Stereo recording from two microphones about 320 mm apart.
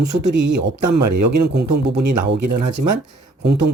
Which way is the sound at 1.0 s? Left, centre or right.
Right.